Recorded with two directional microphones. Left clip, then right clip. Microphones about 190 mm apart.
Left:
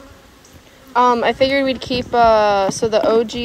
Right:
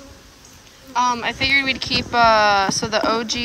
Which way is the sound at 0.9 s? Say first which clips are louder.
Left 6 dB; 5° right (ahead or behind).